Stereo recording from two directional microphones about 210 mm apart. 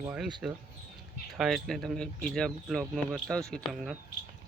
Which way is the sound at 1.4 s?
Centre (ahead or behind).